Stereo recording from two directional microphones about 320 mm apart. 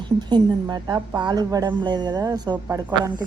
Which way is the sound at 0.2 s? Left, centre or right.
Centre.